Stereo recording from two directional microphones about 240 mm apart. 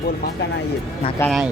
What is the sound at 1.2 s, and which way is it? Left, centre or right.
Speech, centre.